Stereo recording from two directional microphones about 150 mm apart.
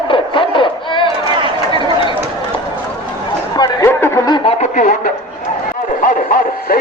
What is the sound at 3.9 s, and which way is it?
Snicker, 15° left (ahead or behind).